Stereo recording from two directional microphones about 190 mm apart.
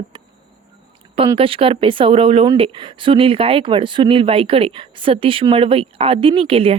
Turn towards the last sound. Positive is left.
turn(degrees=-30)  # may be behind; listen again after turning